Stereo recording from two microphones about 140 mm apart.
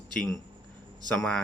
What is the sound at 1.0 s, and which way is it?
Speech, 10° left (ahead or behind).